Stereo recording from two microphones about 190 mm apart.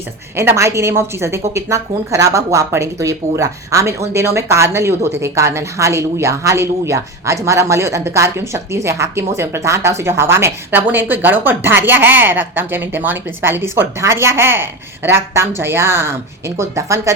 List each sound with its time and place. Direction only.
0.3 s a woman's voice: 15° right (ahead or behind)